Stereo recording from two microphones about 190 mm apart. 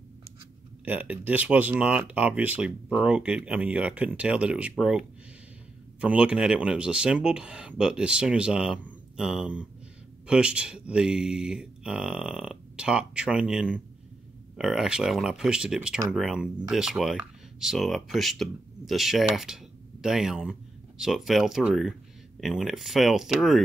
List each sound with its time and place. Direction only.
0.8 s speech: 10° right (ahead or behind)